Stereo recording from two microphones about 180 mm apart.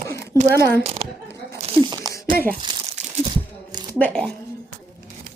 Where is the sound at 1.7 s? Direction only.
25° right (ahead or behind).